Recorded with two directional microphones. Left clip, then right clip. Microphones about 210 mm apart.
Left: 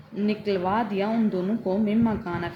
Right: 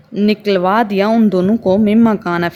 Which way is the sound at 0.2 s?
50° right (ahead or behind).